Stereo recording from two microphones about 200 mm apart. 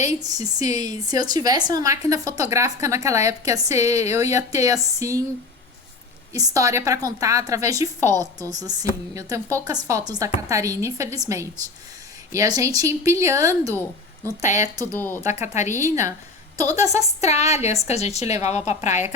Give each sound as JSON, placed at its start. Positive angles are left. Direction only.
{"t": 0.1, "sound": "a woman's voice", "side_deg": -20}
{"t": 6.3, "sound": "a woman's voice", "side_deg": -15}
{"t": 14.9, "sound": "speech", "side_deg": 10}
{"t": 15.4, "sound": "a woman's voice", "side_deg": 35}
{"t": 15.7, "sound": "a woman's voice", "side_deg": -15}
{"t": 16.6, "sound": "a woman's voice", "side_deg": 35}